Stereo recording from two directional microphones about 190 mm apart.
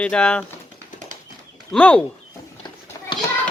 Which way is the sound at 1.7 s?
10° left (ahead or behind).